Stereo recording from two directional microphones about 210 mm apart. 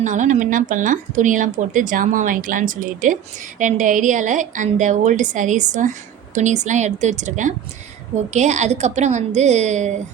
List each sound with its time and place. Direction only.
0.0 s speech: 35° right (ahead or behind)